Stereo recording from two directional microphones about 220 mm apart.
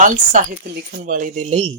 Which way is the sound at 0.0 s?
35° right (ahead or behind).